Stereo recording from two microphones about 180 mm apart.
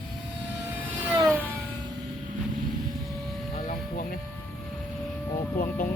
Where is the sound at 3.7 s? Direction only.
50° left (ahead or behind).